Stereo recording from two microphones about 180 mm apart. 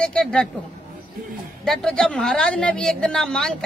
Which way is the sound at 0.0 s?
5° left (ahead or behind).